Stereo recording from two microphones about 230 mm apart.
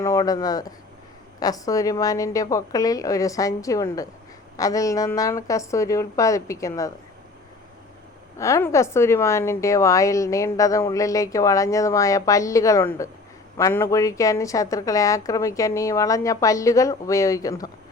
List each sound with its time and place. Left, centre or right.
0.0 s a woman's voice: centre
8.4 s a woman's voice: centre